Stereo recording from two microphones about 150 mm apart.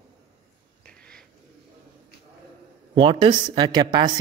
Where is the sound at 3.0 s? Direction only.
35° right (ahead or behind).